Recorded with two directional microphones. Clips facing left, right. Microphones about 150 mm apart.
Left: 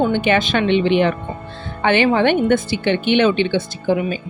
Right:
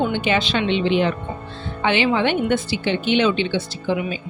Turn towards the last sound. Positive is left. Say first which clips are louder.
# left 4 dB
turn(degrees=50)  # may be behind; listen again after turning